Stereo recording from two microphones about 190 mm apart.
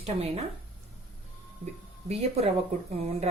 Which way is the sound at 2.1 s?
35° right (ahead or behind).